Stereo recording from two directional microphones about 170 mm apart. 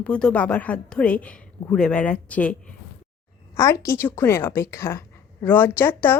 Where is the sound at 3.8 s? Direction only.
15° left (ahead or behind).